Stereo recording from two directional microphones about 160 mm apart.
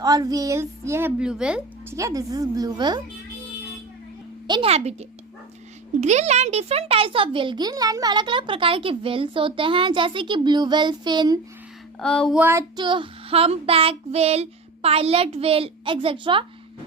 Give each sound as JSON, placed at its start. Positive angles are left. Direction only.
{"t": 0.0, "sound": "speech", "side_deg": -25}
{"t": 1.2, "sound": "speech", "side_deg": -5}
{"t": 2.0, "sound": "speech", "side_deg": -20}
{"t": 4.4, "sound": "a woman's voice", "side_deg": -30}
{"t": 4.7, "sound": "a child's voice", "side_deg": -40}
{"t": 11.9, "sound": "a sound", "side_deg": 5}
{"t": 12.3, "sound": "child singing", "side_deg": -10}
{"t": 12.7, "sound": "a child's voice", "side_deg": -30}